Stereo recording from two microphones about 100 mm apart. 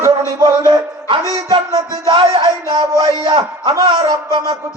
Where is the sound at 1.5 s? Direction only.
55° right (ahead or behind).